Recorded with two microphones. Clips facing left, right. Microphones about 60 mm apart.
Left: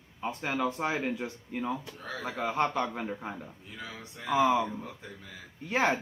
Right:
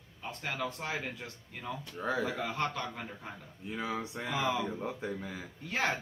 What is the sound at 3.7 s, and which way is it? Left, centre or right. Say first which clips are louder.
Speech: right 11 dB; right.